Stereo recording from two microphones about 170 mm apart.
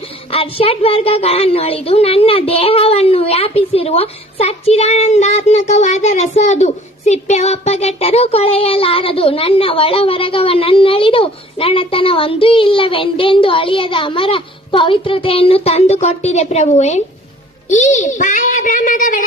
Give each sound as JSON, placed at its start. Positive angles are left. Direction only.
{"t": 0.3, "sound": "a woman's voice", "side_deg": 35}